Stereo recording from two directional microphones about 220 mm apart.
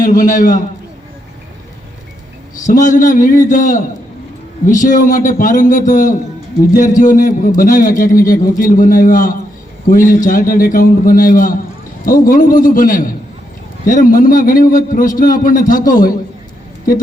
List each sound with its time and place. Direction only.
0.0 s a man's voice: 35° left (ahead or behind)
2.6 s a man's voice: 35° left (ahead or behind)